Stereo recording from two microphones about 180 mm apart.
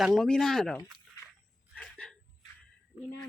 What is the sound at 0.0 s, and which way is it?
Speech, centre (ahead or behind).